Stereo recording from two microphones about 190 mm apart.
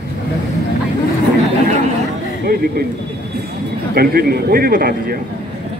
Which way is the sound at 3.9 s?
55° right (ahead or behind).